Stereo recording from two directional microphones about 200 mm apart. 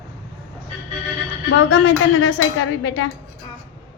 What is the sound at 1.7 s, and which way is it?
A woman's voice, 65° left (ahead or behind).